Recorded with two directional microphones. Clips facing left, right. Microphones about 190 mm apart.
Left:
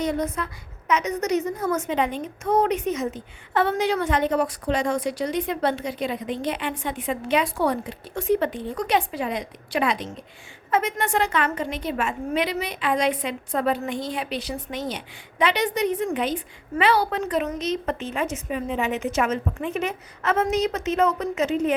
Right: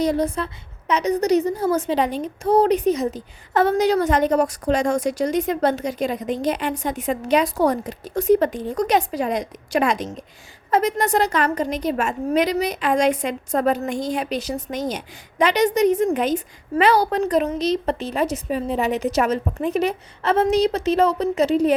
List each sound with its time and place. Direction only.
0.0 s a woman's voice: 35° right (ahead or behind)